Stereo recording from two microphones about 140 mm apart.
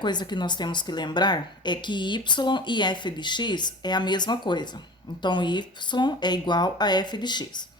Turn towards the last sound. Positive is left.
turn(degrees=30)  # may be behind; listen again after turning